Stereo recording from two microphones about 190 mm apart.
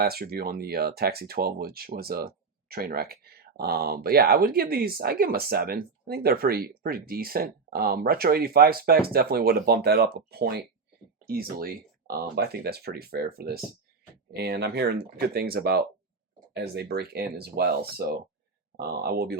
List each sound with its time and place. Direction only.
0.0 s speech: 55° right (ahead or behind)